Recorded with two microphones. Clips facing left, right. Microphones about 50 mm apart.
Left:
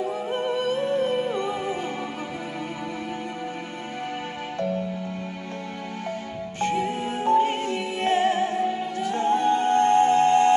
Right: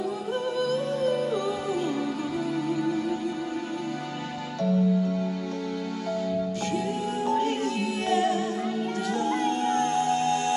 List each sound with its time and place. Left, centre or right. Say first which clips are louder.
0.0 s music: left 2 dB; left
6.6 s music: left 3 dB; left